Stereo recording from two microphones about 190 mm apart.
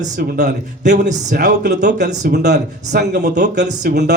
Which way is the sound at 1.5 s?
60° right (ahead or behind).